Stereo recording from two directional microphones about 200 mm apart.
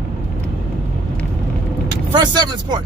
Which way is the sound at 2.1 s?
20° right (ahead or behind).